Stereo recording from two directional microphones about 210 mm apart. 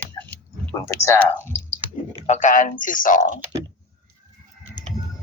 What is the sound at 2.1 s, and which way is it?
A man's voice, 35° left (ahead or behind).